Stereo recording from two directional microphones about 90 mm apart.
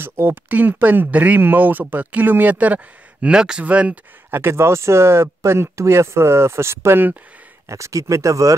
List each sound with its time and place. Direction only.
0.0 s speech: 25° right (ahead or behind)
4.3 s speech: 25° right (ahead or behind)
7.6 s speech: 35° right (ahead or behind)